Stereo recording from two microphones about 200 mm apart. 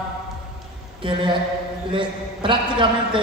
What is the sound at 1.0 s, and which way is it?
A man's voice, 25° right (ahead or behind).